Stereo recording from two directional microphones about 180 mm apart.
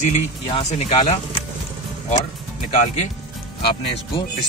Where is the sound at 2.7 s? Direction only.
45° left (ahead or behind).